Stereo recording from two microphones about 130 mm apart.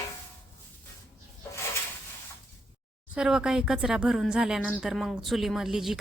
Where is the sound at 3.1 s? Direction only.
5° right (ahead or behind).